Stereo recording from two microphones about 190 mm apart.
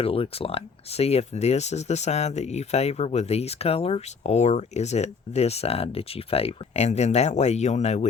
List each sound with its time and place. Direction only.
0.0 s speech: 30° left (ahead or behind)